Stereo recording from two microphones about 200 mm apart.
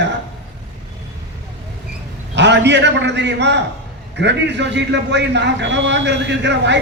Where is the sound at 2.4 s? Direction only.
60° right (ahead or behind).